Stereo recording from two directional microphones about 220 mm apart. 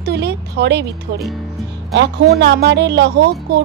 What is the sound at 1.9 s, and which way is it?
Speech, 50° right (ahead or behind).